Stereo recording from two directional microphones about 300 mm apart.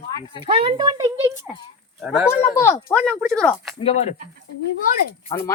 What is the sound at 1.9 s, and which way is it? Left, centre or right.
Speech, centre.